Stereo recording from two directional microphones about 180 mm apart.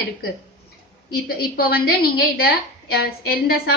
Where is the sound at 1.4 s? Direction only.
60° left (ahead or behind).